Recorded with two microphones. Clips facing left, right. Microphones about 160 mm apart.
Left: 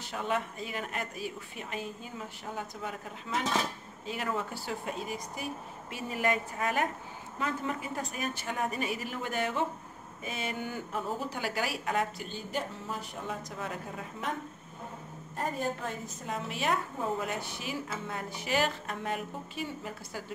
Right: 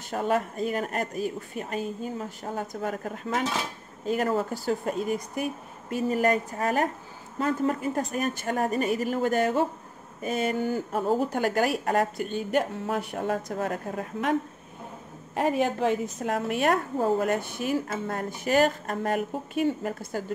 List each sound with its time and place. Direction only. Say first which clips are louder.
0.1 s speech: right 7 dB; 45° right (ahead or behind)
15.3 s a woman's voice: right 9 dB; 85° right; by 20.3 s 50° right (ahead or behind)